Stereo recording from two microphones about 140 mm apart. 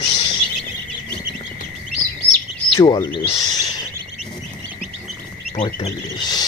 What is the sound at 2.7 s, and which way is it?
Speech, 40° left (ahead or behind).